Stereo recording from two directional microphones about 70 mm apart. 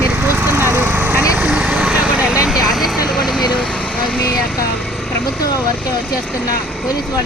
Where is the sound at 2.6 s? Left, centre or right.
Centre.